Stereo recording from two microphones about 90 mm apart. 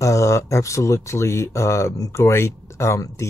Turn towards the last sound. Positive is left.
turn(degrees=35)  # may be behind; listen again after turning